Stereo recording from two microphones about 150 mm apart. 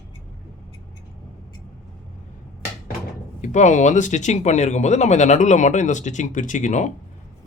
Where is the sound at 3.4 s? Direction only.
55° left (ahead or behind).